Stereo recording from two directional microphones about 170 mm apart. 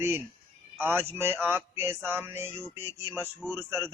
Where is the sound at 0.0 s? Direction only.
15° right (ahead or behind).